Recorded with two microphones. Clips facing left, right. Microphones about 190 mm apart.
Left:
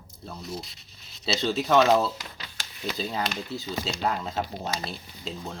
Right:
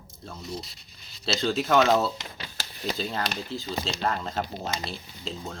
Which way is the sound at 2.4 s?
35° right (ahead or behind).